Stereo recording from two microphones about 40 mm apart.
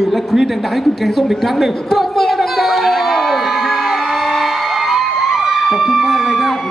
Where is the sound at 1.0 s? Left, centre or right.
Centre.